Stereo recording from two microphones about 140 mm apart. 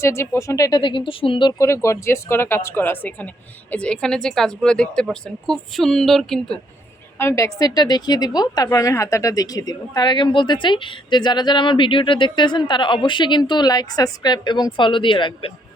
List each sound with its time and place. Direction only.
0.0 s speech: 20° left (ahead or behind)
0.8 s a woman's voice: 35° left (ahead or behind)
1.5 s a woman's voice: 20° left (ahead or behind); by 6.6 s centre (ahead or behind)
7.2 s a woman's voice: 20° left (ahead or behind); by 15.5 s 40° left (ahead or behind)